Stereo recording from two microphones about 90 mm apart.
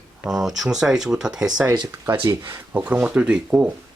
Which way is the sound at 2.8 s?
10° right (ahead or behind).